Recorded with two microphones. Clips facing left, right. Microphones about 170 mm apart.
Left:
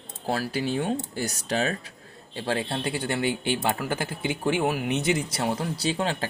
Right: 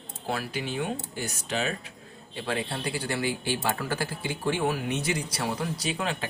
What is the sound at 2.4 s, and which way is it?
Speech, 30° left (ahead or behind).